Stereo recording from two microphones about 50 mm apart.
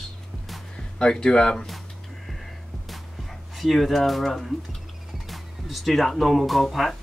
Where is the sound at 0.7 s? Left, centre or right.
Centre.